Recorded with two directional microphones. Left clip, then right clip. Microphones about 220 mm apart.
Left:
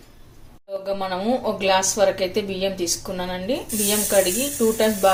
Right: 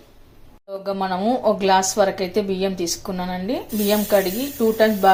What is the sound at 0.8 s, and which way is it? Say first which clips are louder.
Speech: right 3 dB; 25° right (ahead or behind).